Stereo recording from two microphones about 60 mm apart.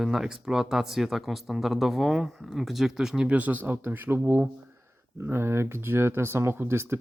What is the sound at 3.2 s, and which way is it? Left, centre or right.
Speech, right.